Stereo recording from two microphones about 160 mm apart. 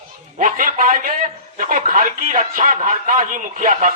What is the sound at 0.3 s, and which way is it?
A man's voice, 55° right (ahead or behind).